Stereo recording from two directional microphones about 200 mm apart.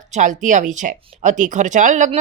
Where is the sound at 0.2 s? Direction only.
40° right (ahead or behind).